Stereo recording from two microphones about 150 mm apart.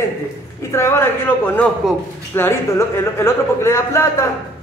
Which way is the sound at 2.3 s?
15° left (ahead or behind).